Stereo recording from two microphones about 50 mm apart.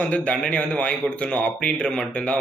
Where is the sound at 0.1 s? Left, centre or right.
Left.